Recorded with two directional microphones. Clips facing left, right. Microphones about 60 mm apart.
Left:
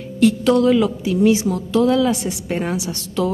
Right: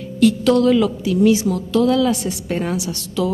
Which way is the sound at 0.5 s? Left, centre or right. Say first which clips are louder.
Even; centre.